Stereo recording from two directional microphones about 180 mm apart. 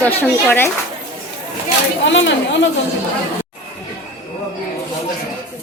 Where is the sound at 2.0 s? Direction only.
85° left.